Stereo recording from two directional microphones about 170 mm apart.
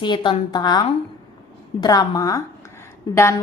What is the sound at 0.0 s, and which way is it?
A woman's voice, 25° left (ahead or behind).